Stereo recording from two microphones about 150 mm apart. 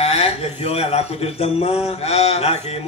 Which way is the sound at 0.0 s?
45° left (ahead or behind).